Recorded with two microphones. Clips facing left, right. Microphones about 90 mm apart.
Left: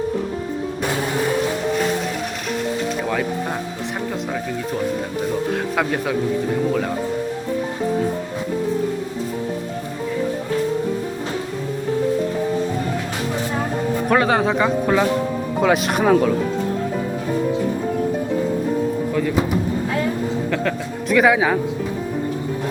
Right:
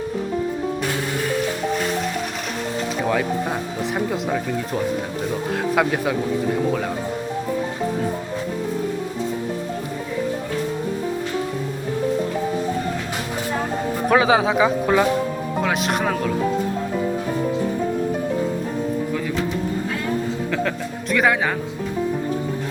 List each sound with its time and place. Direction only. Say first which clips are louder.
3.0 s speech: right 1 dB; centre (ahead or behind)
14.1 s speech: right 1 dB; centre (ahead or behind)
20.5 s speech: left 1 dB; centre (ahead or behind)